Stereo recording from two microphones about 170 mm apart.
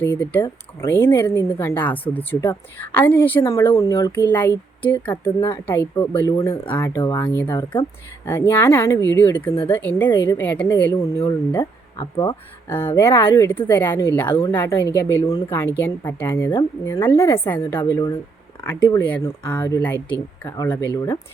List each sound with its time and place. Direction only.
0.0 s speech: 10° left (ahead or behind)
4.1 s speech: 10° left (ahead or behind)
7.5 s speech: 25° left (ahead or behind)
8.3 s speech: 15° left (ahead or behind)
12.1 s speech: 25° left (ahead or behind)
12.6 s speech: 15° left (ahead or behind)